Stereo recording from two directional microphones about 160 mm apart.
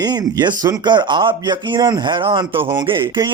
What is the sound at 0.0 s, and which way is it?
Speech, 25° right (ahead or behind).